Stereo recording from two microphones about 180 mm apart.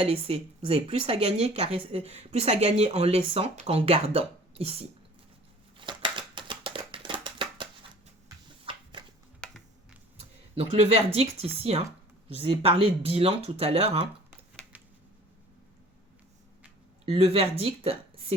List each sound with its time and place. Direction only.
0.0 s speech: 35° right (ahead or behind)
5.7 s a sound: 25° right (ahead or behind)
9.4 s computer keyboard: 5° left (ahead or behind)
10.5 s speech: 35° right (ahead or behind)
17.1 s speech: 35° right (ahead or behind)